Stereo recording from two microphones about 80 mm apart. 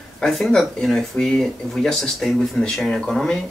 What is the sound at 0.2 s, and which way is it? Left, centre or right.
Speech, centre.